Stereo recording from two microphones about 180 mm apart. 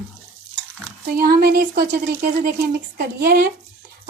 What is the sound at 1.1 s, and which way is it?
Speech, 60° right (ahead or behind).